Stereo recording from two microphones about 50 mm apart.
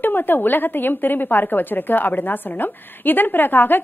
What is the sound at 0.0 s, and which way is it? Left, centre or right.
A woman's voice, left.